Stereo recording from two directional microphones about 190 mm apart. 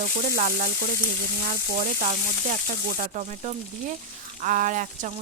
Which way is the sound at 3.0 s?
40° right (ahead or behind).